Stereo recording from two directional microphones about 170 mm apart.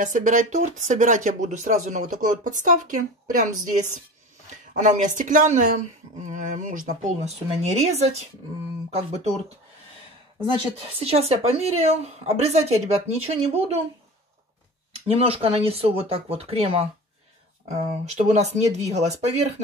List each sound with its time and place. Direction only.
0.0 s speech: 50° right (ahead or behind)
11.0 s speech: 35° right (ahead or behind)
14.9 s speech: 35° right (ahead or behind)